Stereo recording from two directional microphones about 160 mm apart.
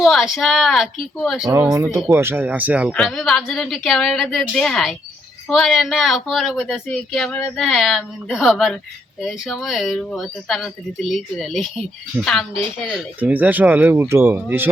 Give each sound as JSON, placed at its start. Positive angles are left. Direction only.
{"t": 0.0, "sound": "a woman's voice", "side_deg": 0}
{"t": 1.7, "sound": "speech", "side_deg": -20}
{"t": 2.9, "sound": "a woman's voice", "side_deg": 0}
{"t": 12.9, "sound": "speech", "side_deg": -10}